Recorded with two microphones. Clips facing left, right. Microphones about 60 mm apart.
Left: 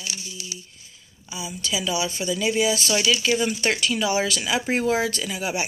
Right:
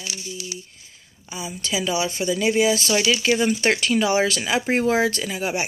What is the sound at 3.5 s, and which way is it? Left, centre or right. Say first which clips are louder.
Speech: right 3 dB; right.